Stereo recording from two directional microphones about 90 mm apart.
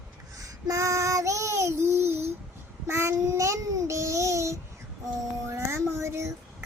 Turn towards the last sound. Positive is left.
turn(degrees=-30)  # may be behind; listen again after turning